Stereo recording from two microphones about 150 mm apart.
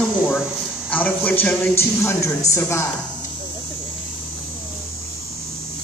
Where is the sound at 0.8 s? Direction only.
10° left (ahead or behind).